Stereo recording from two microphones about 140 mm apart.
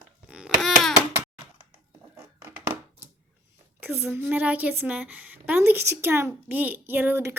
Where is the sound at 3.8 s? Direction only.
15° right (ahead or behind).